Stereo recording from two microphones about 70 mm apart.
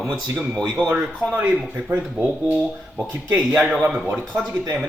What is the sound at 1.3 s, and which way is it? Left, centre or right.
Speech, right.